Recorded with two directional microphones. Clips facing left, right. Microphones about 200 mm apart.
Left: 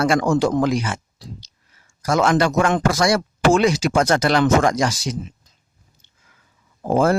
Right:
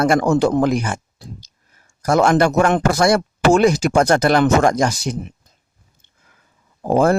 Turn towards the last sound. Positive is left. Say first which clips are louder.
# right 2 dB
turn(degrees=-45)  # may be behind; listen again after turning